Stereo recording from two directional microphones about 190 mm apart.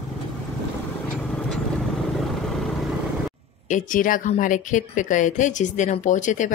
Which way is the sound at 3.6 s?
40° left (ahead or behind).